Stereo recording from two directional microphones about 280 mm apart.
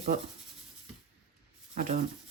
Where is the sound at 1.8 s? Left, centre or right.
Right.